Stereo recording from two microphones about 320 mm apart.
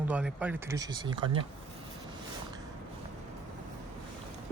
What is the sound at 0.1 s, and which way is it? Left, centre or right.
Speech, centre.